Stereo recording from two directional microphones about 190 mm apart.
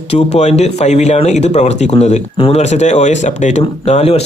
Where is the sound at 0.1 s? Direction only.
35° left (ahead or behind).